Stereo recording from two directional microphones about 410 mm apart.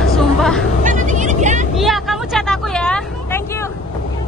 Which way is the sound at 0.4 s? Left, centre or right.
Centre.